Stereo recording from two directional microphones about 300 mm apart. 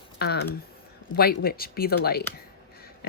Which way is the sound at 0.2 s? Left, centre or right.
Left.